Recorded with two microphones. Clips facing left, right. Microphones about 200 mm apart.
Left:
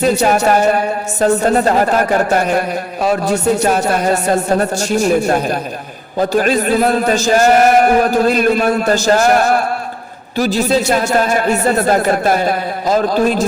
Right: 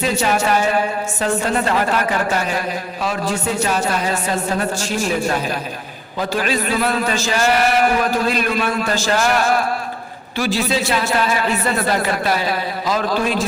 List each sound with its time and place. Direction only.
0.0 s a man's voice: 40° left (ahead or behind)
3.8 s a man's voice: 55° left (ahead or behind)